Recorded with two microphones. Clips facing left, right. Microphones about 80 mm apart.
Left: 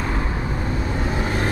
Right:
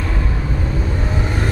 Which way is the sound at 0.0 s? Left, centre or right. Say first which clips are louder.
Right 1 dB; left.